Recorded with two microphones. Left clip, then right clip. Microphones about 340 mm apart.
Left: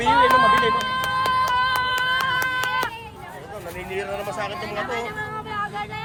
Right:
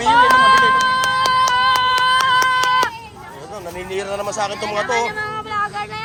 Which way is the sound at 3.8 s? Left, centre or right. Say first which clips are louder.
Right 5 dB; centre.